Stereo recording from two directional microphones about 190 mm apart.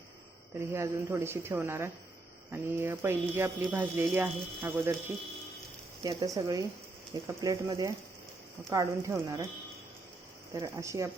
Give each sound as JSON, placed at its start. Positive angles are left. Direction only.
{"t": 0.7, "sound": "speech", "side_deg": -15}
{"t": 6.0, "sound": "speech", "side_deg": -20}
{"t": 10.5, "sound": "speech", "side_deg": -15}